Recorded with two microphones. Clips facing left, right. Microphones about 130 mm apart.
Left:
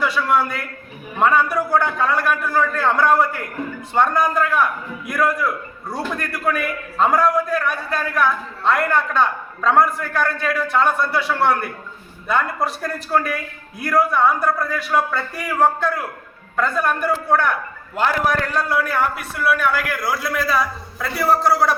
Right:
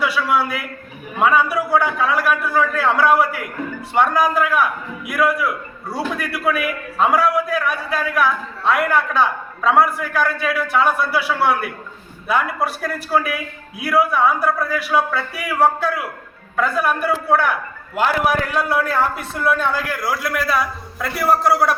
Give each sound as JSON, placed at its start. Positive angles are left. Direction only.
{"t": 0.0, "sound": "a man's voice", "side_deg": -5}
{"t": 18.9, "sound": "a man's voice", "side_deg": -25}
{"t": 20.1, "sound": "a man's voice", "side_deg": -5}